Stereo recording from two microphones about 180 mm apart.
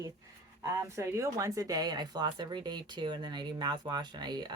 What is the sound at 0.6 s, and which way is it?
Speech, 15° right (ahead or behind).